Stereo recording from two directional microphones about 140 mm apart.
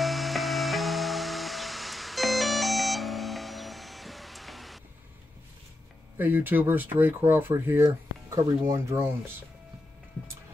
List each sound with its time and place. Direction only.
0.0 s music: centre (ahead or behind)
6.1 s speech: 15° right (ahead or behind)